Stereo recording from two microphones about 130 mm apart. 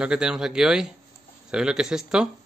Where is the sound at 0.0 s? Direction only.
5° right (ahead or behind).